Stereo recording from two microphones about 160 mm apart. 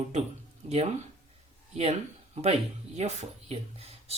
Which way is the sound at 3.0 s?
40° right (ahead or behind).